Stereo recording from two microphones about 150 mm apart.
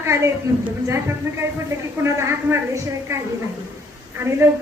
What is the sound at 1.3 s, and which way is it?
A woman's voice, 15° right (ahead or behind).